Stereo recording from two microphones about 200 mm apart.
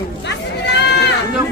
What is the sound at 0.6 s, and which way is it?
Sheep, 60° left (ahead or behind).